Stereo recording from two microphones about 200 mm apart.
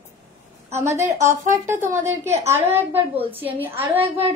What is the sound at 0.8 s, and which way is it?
Speech, 15° right (ahead or behind).